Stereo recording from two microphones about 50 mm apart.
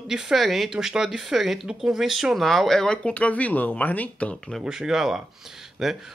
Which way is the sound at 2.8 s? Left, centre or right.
Left.